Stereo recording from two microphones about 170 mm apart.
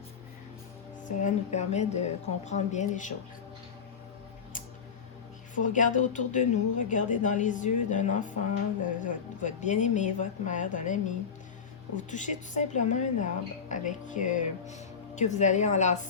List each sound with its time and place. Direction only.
1.0 s a woman's voice: 45° left (ahead or behind)
5.5 s a woman's voice: 50° left (ahead or behind)